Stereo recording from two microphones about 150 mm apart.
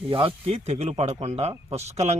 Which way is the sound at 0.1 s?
40° right (ahead or behind).